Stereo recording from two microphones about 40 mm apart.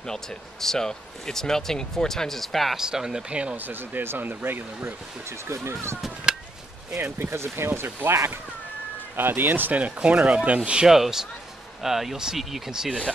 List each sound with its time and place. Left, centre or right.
0.0 s speech: centre
2.8 s speech: centre
3.3 s speech: right
3.5 s speech: right
5.7 s speech: right
6.3 s chop: centre
7.0 s speech: right
9.8 s speech: right
10.9 s speech: centre